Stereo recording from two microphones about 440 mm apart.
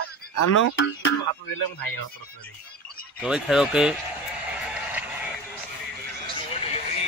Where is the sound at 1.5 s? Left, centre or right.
Left.